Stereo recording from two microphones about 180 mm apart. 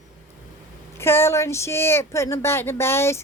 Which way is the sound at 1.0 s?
15° left (ahead or behind).